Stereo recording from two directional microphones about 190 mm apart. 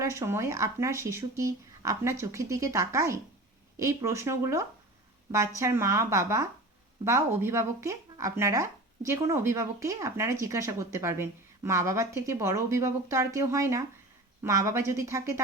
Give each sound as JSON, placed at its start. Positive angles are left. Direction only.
{"t": 0.0, "sound": "speech", "side_deg": -15}